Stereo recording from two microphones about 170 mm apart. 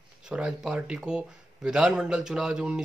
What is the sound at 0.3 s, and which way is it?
A man's voice, 5° right (ahead or behind).